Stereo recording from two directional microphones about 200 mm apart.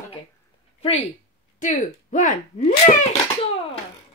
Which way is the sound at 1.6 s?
40° left (ahead or behind).